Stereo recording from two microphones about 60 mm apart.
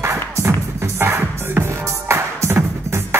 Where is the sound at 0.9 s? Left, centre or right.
Right.